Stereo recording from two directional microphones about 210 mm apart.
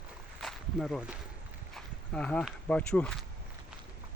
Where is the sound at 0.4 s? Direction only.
Centre (ahead or behind).